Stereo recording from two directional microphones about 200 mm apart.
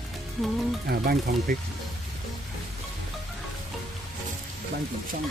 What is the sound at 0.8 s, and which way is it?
Speech, 50° right (ahead or behind).